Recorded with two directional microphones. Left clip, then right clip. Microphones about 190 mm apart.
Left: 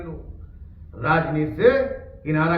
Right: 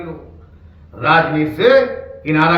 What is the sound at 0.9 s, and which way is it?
A man's voice, 15° right (ahead or behind).